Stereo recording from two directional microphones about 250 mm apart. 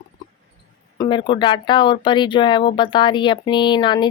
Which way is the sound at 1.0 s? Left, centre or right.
Centre.